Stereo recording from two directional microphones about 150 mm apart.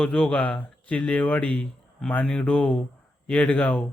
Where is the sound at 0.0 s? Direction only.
5° left (ahead or behind).